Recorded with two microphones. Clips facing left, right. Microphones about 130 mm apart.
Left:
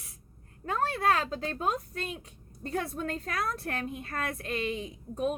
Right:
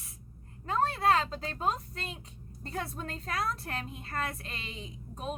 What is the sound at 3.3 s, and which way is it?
A woman's voice, 55° left (ahead or behind).